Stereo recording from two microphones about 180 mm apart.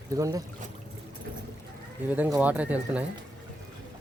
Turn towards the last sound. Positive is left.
turn(degrees=-10)  # may be behind; listen again after turning